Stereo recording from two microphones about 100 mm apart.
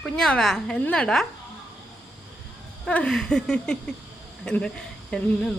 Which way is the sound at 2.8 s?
10° left (ahead or behind).